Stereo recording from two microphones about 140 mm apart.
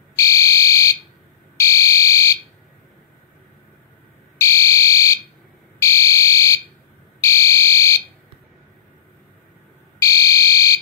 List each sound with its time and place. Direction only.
0.1 s fire alarm: 20° left (ahead or behind)
4.4 s fire alarm: 20° left (ahead or behind)
9.9 s fire alarm: 25° left (ahead or behind)